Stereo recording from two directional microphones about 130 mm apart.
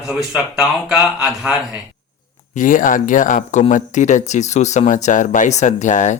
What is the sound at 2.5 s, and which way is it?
Speech, 85° left.